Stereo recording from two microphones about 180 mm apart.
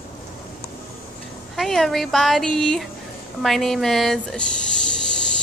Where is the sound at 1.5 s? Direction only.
Centre (ahead or behind).